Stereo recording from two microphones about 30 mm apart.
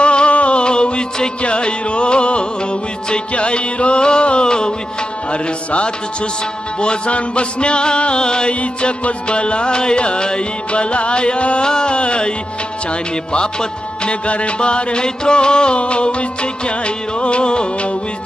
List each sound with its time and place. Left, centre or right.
0.0 s music: left
11.6 s music: left
14.2 s music: left